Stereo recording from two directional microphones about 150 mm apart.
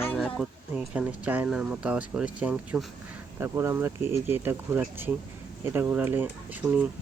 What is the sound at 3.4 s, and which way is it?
Speech, 20° right (ahead or behind).